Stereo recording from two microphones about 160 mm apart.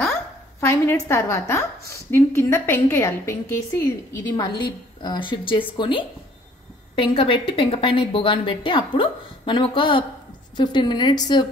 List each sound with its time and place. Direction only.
0.6 s a woman's voice: 15° left (ahead or behind)